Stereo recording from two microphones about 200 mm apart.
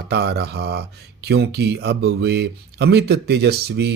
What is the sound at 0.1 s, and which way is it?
Speech, 55° right (ahead or behind).